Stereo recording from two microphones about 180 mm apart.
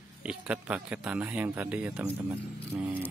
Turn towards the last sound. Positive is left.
turn(degrees=-10)  # may be behind; listen again after turning